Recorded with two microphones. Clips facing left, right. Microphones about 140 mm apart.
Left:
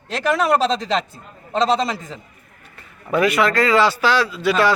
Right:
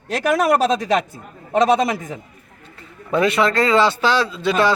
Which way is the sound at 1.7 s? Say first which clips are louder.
Right 3 dB; 15° right (ahead or behind).